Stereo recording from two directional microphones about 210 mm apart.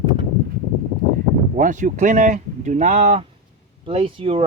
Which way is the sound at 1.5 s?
35° right (ahead or behind).